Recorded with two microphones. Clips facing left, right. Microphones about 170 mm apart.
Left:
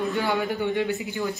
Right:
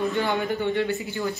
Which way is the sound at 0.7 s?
15° left (ahead or behind).